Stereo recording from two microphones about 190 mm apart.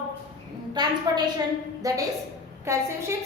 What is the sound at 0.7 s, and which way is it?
A woman's voice, 20° right (ahead or behind).